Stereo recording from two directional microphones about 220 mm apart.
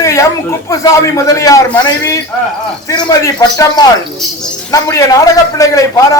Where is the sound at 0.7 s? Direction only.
15° left (ahead or behind).